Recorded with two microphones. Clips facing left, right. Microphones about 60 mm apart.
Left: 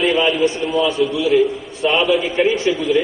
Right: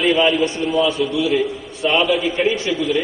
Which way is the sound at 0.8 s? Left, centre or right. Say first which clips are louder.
Left 1 dB; left.